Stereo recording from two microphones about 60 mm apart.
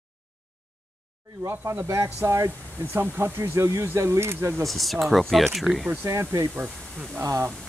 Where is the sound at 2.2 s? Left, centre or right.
Right.